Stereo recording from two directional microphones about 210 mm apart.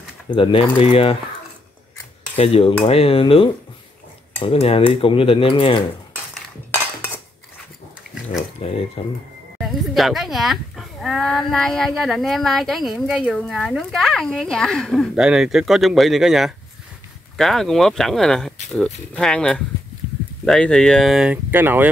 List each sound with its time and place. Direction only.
0.3 s cutlery: 25° left (ahead or behind)
2.3 s cutlery: 30° left (ahead or behind)
9.0 s cutlery: 30° left (ahead or behind)
9.6 s speech: centre (ahead or behind)